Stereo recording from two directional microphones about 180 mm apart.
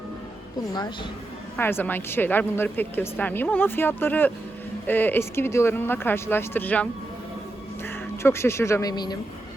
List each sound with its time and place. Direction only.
1.5 s speech: 10° left (ahead or behind)
8.2 s speech: 15° left (ahead or behind)